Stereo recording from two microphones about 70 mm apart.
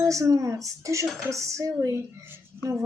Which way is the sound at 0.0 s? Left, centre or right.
Right.